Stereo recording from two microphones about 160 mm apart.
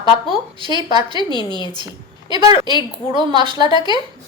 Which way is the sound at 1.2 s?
30° left (ahead or behind).